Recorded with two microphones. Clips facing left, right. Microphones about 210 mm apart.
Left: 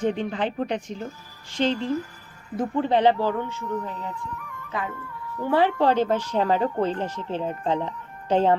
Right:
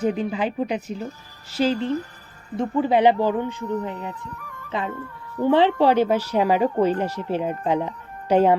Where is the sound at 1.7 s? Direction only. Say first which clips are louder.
Right 2 dB; 35° right (ahead or behind).